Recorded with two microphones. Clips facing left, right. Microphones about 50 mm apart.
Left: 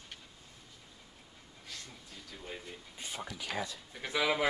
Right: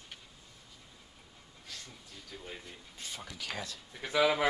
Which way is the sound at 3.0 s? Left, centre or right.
Left.